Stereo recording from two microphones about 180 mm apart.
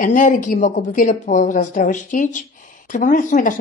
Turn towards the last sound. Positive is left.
turn(degrees=45)  # may be behind; listen again after turning